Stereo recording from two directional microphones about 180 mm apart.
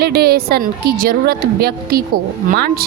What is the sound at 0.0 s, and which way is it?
A woman's voice, 60° right (ahead or behind).